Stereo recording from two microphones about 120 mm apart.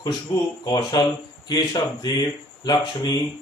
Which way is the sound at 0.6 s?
35° left (ahead or behind).